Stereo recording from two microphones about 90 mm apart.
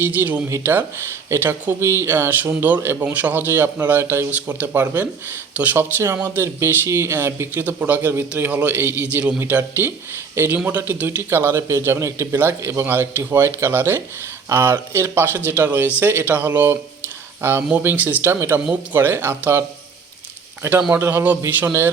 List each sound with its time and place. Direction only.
0.0 s a man's voice: 20° right (ahead or behind)
4.3 s a man's voice: 15° right (ahead or behind)